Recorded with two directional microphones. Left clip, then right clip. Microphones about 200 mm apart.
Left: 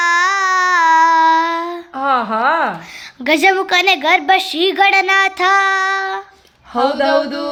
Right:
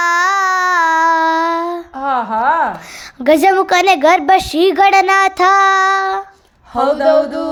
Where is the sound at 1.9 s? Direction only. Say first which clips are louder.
Left 1 dB; 35° left (ahead or behind).